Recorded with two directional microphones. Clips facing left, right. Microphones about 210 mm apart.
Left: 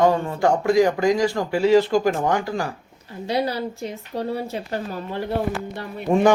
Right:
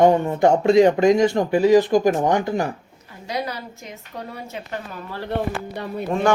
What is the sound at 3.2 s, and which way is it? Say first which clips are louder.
A woman's voice: left 5 dB; 30° left (ahead or behind).